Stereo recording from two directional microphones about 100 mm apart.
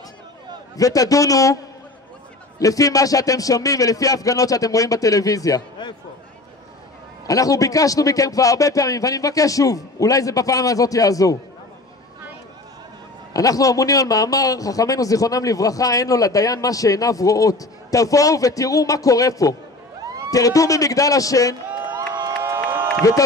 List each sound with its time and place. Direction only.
0.7 s a man's voice: 35° left (ahead or behind)
2.6 s a man's voice: 35° left (ahead or behind)
7.2 s a man's voice: 35° left (ahead or behind)
13.3 s a man's voice: 35° left (ahead or behind)
21.8 s crowd: 45° right (ahead or behind)
22.4 s crowd: 25° right (ahead or behind)